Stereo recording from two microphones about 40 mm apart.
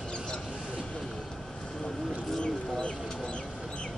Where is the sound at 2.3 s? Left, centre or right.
Left.